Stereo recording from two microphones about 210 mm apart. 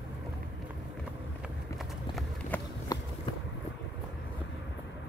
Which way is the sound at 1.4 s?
Centre (ahead or behind).